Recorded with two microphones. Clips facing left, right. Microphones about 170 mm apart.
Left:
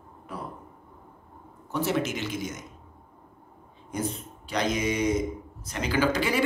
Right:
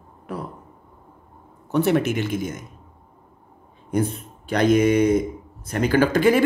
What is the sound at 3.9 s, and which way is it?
Speech, 55° right (ahead or behind).